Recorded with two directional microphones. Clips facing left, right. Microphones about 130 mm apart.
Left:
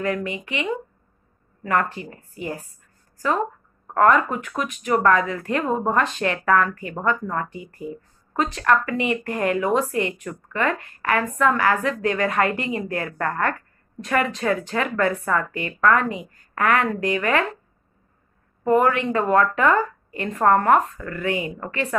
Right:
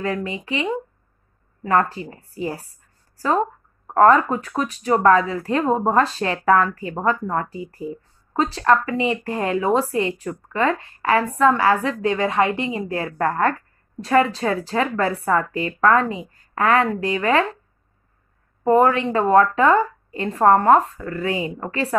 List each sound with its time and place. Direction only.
0.0 s speech: 30° right (ahead or behind)
18.6 s speech: 30° right (ahead or behind)